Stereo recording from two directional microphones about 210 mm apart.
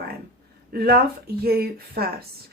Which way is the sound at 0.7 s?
45° right (ahead or behind).